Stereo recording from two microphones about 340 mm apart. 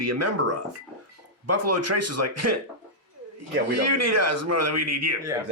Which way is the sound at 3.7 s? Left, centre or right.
Right.